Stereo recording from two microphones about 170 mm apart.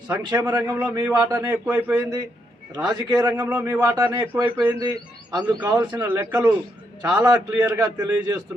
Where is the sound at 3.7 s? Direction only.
25° right (ahead or behind).